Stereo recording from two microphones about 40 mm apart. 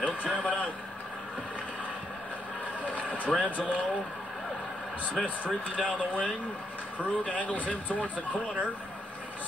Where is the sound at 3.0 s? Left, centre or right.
Right.